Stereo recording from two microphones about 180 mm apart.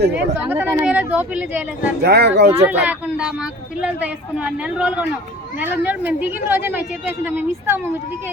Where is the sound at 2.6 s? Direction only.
5° right (ahead or behind).